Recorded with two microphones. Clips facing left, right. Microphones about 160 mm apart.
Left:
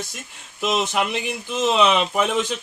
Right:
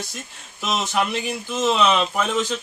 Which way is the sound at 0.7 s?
15° left (ahead or behind).